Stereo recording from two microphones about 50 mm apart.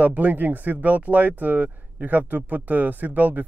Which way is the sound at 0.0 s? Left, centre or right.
Right.